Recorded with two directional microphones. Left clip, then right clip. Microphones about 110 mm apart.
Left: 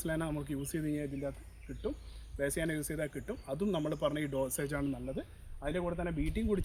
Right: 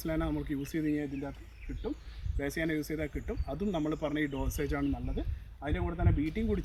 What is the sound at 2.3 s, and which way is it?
Speech, 30° left (ahead or behind).